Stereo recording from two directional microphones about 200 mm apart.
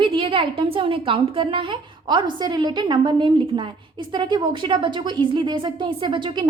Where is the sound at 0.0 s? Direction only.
25° right (ahead or behind).